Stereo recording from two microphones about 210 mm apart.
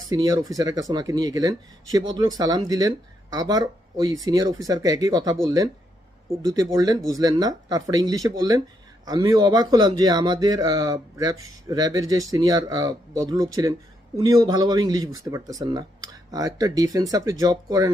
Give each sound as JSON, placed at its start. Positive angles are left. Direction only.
{"t": 0.1, "sound": "speech", "side_deg": -20}